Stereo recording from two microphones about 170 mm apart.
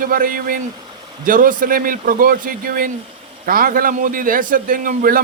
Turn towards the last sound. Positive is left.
turn(degrees=-55)  # may be behind; listen again after turning